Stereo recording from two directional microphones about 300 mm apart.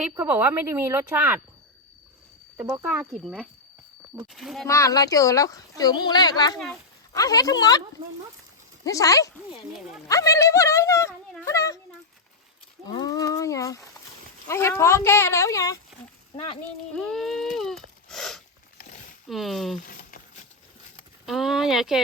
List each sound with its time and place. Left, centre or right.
0.0 s speech: centre
2.6 s speech: centre
8.8 s a woman's voice: centre
12.8 s speech: centre
17.0 s speech: centre
19.8 s a sound: left
21.2 s speech: centre